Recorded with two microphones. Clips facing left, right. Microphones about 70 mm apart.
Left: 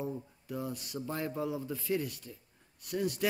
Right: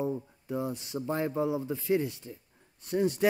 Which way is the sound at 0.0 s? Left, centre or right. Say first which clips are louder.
Right 6 dB; right.